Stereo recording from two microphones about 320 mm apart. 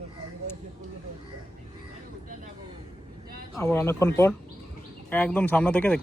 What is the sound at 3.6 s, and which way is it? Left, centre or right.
Speech, centre.